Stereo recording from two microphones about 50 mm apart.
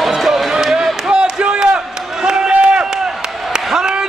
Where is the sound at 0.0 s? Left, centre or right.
Centre.